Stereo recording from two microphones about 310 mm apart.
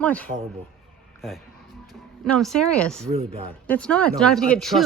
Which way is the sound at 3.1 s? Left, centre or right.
Right.